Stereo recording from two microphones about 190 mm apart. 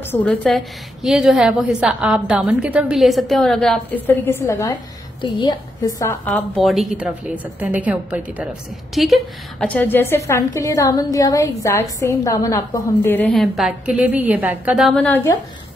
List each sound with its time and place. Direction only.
0.0 s a woman's voice: 10° left (ahead or behind)
6.5 s a woman's voice: centre (ahead or behind)